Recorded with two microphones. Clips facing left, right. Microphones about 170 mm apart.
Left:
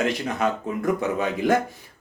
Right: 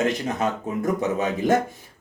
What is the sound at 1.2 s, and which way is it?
Speech, 45° right (ahead or behind).